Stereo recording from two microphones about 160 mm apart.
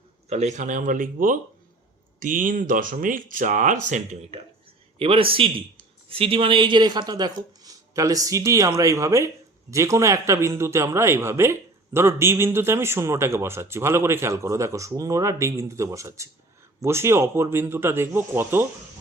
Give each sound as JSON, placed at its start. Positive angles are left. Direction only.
{"t": 0.3, "sound": "speech", "side_deg": -45}
{"t": 4.9, "sound": "a man's voice", "side_deg": -35}